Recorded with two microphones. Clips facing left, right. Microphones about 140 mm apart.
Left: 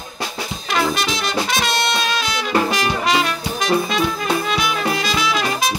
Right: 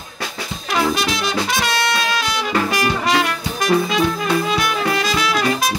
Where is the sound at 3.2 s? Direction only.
5° right (ahead or behind).